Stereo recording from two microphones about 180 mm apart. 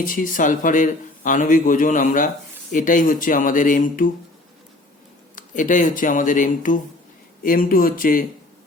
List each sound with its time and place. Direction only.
0.0 s a man's voice: 50° left (ahead or behind)
5.3 s a man's voice: 45° left (ahead or behind)